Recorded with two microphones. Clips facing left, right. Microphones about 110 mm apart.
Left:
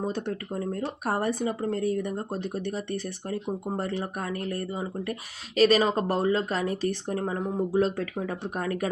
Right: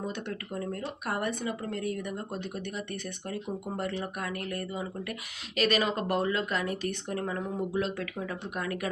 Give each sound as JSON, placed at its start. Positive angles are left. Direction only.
{"t": 0.0, "sound": "speech", "side_deg": 35}